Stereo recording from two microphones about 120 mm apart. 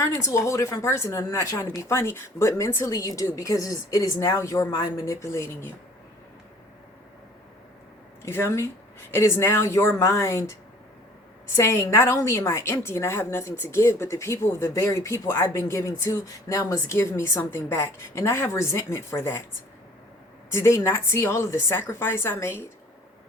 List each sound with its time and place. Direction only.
0.0 s a woman's voice: 25° left (ahead or behind)
8.2 s a woman's voice: 20° left (ahead or behind)
11.5 s a woman's voice: 25° left (ahead or behind)
20.5 s a woman's voice: 20° left (ahead or behind)